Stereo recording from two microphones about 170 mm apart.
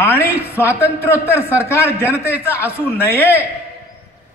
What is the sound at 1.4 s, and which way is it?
Speech, 15° left (ahead or behind).